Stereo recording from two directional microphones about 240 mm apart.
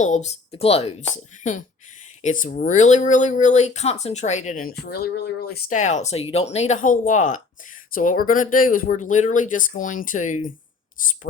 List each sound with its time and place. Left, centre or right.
0.0 s speech: left